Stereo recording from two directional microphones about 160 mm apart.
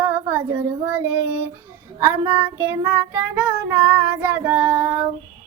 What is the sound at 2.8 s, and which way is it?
Child singing, 25° right (ahead or behind).